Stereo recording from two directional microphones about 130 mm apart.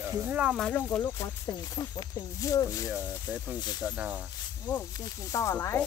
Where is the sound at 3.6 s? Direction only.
30° left (ahead or behind).